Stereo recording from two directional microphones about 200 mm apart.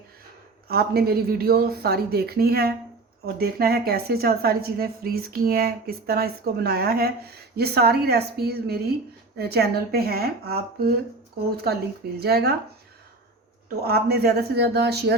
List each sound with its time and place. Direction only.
0.7 s a woman's voice: 50° right (ahead or behind)
13.8 s a woman's voice: 50° right (ahead or behind)